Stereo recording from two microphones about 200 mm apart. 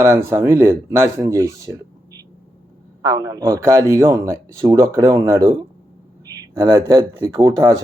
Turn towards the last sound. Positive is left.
turn(degrees=-20)  # may be behind; listen again after turning